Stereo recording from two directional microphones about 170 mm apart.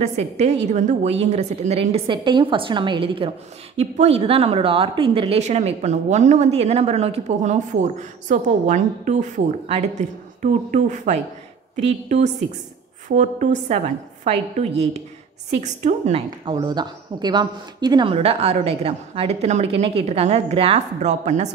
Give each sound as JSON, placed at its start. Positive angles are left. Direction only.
{"t": 0.0, "sound": "speech", "side_deg": -40}
{"t": 13.1, "sound": "a woman's voice", "side_deg": -45}